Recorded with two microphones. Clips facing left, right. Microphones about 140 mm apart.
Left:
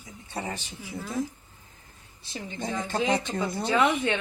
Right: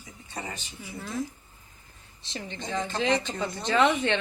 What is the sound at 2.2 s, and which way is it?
A woman's voice, 5° left (ahead or behind).